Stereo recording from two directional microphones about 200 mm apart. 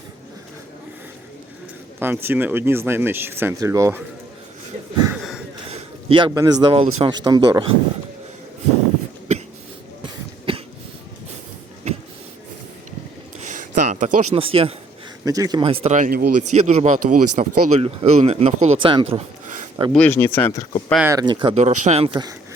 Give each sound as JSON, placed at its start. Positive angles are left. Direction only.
{"t": 2.0, "sound": "speech", "side_deg": -10}
{"t": 5.0, "sound": "a sound", "side_deg": -5}
{"t": 5.7, "sound": "a man's voice", "side_deg": -25}
{"t": 10.0, "sound": "cough", "side_deg": -25}
{"t": 13.6, "sound": "a sound", "side_deg": -40}
{"t": 14.3, "sound": "speech", "side_deg": -30}
{"t": 15.2, "sound": "speech", "side_deg": -15}
{"t": 16.5, "sound": "speech", "side_deg": -35}
{"t": 19.9, "sound": "speech", "side_deg": 10}
{"t": 20.9, "sound": "speech", "side_deg": -10}
{"t": 21.2, "sound": "speech", "side_deg": -25}
{"t": 21.6, "sound": "speech", "side_deg": -35}